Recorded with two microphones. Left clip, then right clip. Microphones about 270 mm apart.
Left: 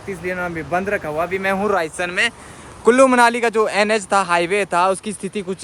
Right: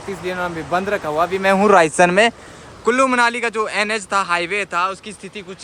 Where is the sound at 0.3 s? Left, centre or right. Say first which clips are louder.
Right 1 dB; centre.